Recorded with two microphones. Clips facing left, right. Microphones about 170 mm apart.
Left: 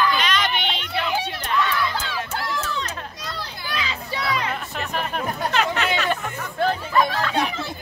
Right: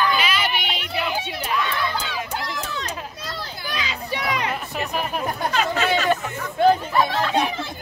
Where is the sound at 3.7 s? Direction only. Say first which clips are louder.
Even; 15° right (ahead or behind).